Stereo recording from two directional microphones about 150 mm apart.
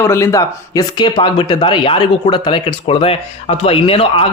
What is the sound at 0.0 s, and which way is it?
Speech, 20° left (ahead or behind).